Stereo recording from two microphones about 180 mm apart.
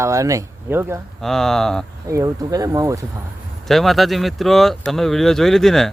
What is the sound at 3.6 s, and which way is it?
Speech, centre (ahead or behind).